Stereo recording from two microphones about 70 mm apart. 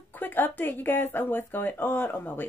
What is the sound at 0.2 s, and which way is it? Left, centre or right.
Speech, left.